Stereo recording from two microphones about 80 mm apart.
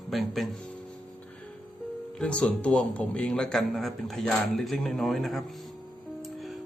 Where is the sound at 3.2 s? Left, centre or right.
Centre.